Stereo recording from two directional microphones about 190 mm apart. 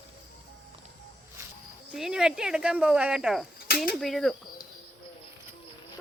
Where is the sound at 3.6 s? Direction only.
55° left (ahead or behind).